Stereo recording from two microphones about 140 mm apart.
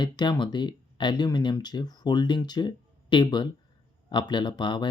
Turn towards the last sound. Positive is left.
turn(degrees=35)  # may be behind; listen again after turning